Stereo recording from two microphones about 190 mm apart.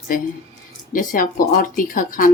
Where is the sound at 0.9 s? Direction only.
45° left (ahead or behind).